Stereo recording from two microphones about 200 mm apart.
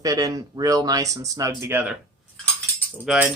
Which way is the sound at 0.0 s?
15° right (ahead or behind).